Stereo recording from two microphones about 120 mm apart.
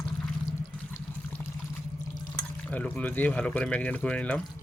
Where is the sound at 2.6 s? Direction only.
10° left (ahead or behind).